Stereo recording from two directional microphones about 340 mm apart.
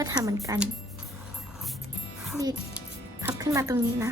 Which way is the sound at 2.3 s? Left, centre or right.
Centre.